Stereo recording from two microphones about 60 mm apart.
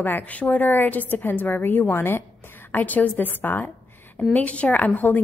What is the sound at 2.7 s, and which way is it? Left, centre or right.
A woman's voice, left.